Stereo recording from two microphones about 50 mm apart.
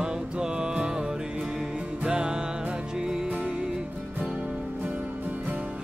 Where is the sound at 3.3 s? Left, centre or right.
Right.